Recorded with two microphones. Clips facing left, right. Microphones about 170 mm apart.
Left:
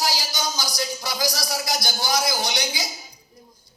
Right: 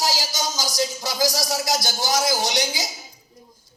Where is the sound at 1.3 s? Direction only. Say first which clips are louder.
Right 3 dB; 40° right (ahead or behind).